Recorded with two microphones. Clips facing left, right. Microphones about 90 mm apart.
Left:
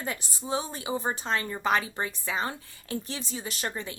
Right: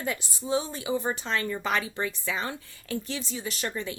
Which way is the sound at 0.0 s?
30° left (ahead or behind).